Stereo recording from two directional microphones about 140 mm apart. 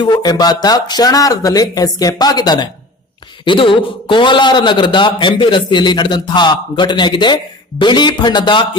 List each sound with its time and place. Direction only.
0.0 s a man's voice: 30° left (ahead or behind)